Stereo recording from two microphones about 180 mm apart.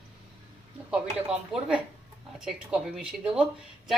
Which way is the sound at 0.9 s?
5° right (ahead or behind).